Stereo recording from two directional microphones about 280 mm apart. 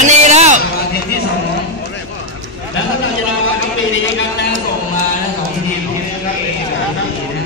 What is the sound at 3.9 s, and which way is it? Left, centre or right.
Speech, left.